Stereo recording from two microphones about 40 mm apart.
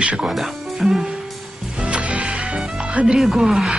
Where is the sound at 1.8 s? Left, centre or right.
Right.